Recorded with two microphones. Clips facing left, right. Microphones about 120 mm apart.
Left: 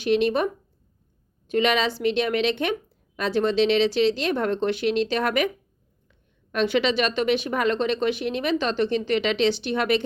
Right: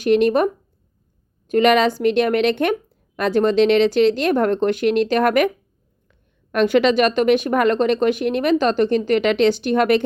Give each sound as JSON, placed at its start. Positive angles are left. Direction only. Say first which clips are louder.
{"t": 0.0, "sound": "a woman's voice", "louder": "right 6 dB", "side_deg": -50}